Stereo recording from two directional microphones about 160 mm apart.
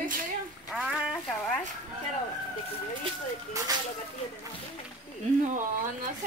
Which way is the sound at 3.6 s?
20° right (ahead or behind).